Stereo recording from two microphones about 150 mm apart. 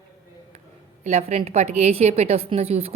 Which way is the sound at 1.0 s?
45° right (ahead or behind).